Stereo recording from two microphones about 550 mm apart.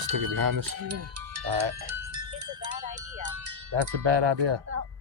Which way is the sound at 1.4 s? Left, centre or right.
Right.